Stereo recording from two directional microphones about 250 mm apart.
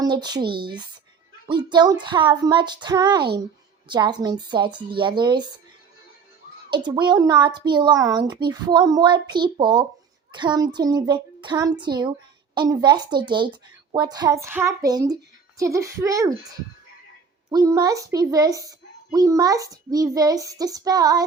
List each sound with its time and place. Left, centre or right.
0.0 s speech: centre
6.7 s speech: centre
17.5 s speech: centre